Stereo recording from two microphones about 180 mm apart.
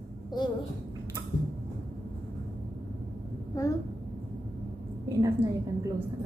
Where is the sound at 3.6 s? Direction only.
20° left (ahead or behind).